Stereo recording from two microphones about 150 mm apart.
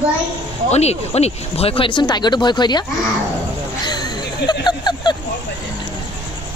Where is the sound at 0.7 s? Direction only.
45° left (ahead or behind); by 2.8 s 30° left (ahead or behind).